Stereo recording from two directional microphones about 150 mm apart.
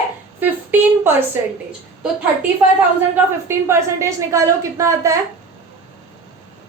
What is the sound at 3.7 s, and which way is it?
A woman's voice, 20° right (ahead or behind).